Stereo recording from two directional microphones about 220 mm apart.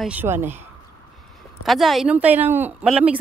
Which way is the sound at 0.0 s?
10° right (ahead or behind).